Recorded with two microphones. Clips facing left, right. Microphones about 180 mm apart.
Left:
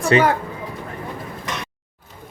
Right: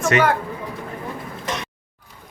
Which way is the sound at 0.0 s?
30° left (ahead or behind).